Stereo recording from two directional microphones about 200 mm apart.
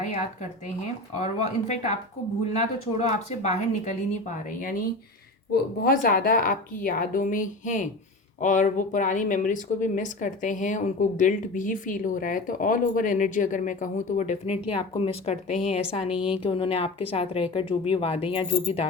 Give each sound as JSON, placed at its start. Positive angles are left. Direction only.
{"t": 1.2, "sound": "speech", "side_deg": 35}
{"t": 5.8, "sound": "a woman's voice", "side_deg": 45}